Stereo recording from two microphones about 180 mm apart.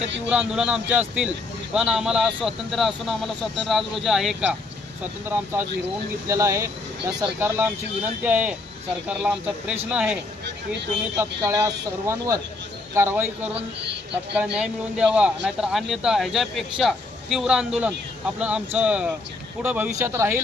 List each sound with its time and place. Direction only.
0.3 s a man's voice: 5° right (ahead or behind)
11.2 s a man's voice: 15° right (ahead or behind)